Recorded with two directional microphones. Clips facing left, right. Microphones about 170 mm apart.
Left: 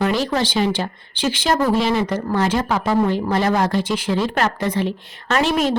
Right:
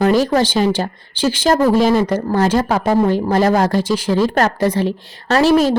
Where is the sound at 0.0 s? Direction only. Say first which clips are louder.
Right 6 dB; 45° right (ahead or behind).